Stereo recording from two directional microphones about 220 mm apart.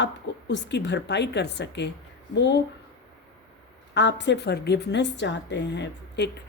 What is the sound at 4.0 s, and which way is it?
A woman's voice, 50° left (ahead or behind).